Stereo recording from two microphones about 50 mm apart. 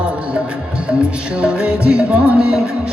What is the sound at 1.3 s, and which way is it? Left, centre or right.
Music, right.